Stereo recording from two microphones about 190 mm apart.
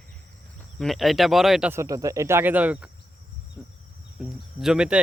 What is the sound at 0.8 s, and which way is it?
Speech, centre (ahead or behind).